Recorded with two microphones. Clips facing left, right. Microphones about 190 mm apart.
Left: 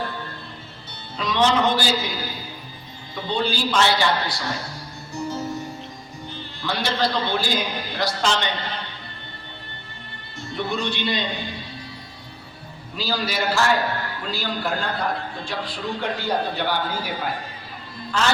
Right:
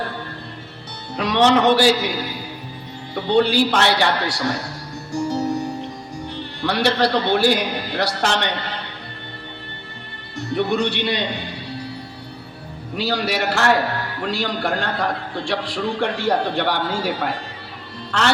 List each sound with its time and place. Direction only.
1.1 s a man's voice: 70° right (ahead or behind)
3.2 s a man's voice: 70° right (ahead or behind)
5.1 s music: 70° right (ahead or behind)
10.3 s a man's voice: 70° right (ahead or behind)
13.0 s a man's voice: 70° right (ahead or behind)